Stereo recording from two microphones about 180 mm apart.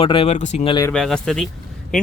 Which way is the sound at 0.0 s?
30° left (ahead or behind).